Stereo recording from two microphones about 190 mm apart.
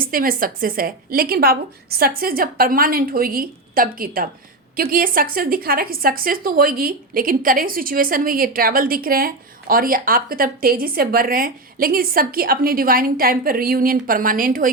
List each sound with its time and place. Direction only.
0.0 s a woman's voice: 50° right (ahead or behind)